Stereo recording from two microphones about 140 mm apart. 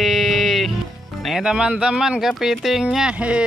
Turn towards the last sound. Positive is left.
turn(degrees=-10)  # may be behind; listen again after turning